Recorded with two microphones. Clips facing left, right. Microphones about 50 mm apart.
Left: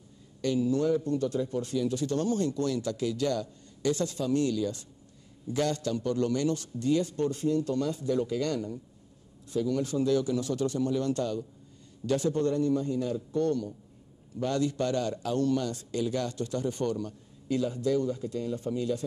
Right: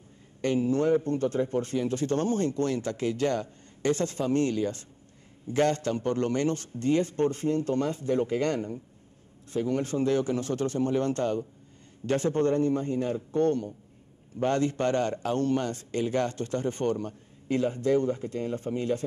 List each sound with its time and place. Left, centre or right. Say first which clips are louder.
0.4 s a man's voice: right 1 dB; right